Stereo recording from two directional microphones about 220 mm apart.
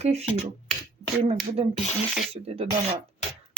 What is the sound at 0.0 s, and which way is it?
Speech, 30° right (ahead or behind).